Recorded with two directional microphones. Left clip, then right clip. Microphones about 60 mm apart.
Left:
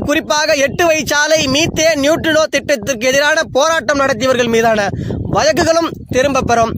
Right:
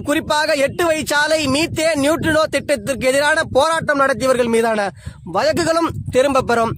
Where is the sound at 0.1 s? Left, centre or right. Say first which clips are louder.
Left 3 dB; centre.